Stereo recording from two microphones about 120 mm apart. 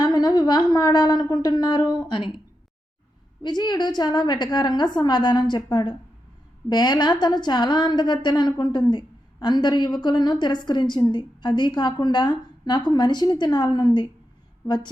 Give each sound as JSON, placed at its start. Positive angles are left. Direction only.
{"t": 0.0, "sound": "a woman's voice", "side_deg": 30}
{"t": 3.4, "sound": "a woman's voice", "side_deg": 35}